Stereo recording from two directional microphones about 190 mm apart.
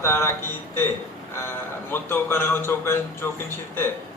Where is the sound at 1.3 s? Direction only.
10° left (ahead or behind).